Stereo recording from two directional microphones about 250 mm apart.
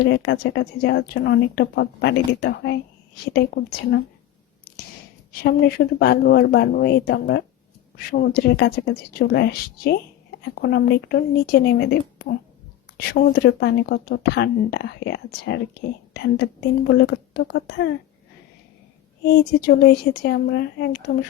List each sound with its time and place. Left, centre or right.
0.0 s speech: left
5.4 s a woman's voice: left
19.3 s speech: left